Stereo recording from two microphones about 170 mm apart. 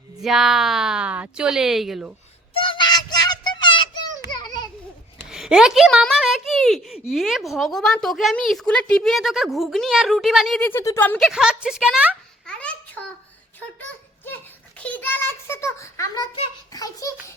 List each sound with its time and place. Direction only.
0.2 s speech: centre (ahead or behind)
2.5 s child singing: 30° left (ahead or behind)
4.3 s children playing: 25° left (ahead or behind)
5.3 s speech: 5° right (ahead or behind)
11.3 s speech: 5° right (ahead or behind)
12.5 s a sound: 5° left (ahead or behind)